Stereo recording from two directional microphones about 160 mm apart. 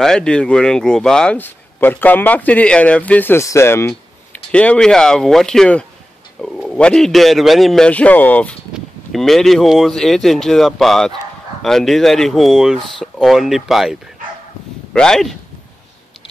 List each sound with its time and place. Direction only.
0.0 s a man's voice: 5° left (ahead or behind)